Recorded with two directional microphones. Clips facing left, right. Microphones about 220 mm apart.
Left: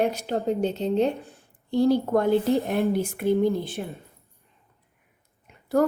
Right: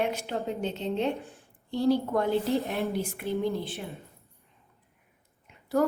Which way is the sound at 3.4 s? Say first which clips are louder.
Left 6 dB; 45° left (ahead or behind).